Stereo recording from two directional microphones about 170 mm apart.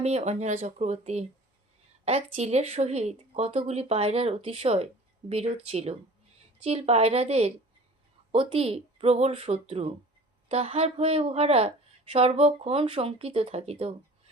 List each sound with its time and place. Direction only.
0.0 s speech: 40° right (ahead or behind)